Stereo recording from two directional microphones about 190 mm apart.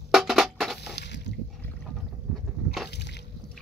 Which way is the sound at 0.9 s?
65° left (ahead or behind).